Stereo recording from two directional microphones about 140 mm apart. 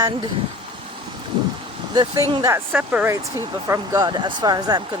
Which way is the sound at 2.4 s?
15° right (ahead or behind).